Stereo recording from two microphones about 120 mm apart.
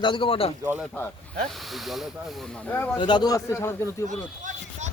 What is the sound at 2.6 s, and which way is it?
Speech, 15° left (ahead or behind).